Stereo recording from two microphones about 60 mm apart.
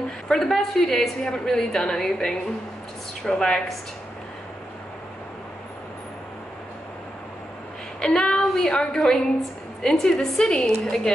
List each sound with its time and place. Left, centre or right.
0.3 s a woman's voice: centre
8.0 s a woman's voice: centre